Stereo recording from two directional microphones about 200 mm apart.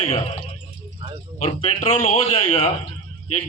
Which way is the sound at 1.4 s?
35° left (ahead or behind).